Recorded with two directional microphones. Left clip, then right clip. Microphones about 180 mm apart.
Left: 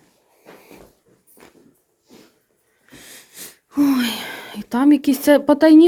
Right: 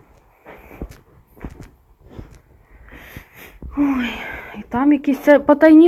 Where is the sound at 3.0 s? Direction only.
20° left (ahead or behind).